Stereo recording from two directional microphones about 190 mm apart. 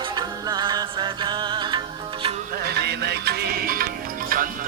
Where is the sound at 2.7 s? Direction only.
60° right (ahead or behind).